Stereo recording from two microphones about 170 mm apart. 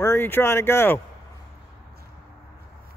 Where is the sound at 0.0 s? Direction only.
15° left (ahead or behind).